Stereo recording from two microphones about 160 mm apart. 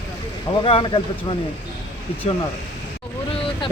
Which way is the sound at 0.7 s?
35° left (ahead or behind).